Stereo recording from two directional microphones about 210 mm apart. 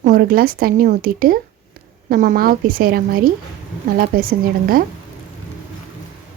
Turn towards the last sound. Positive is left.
turn(degrees=-40)  # may be behind; listen again after turning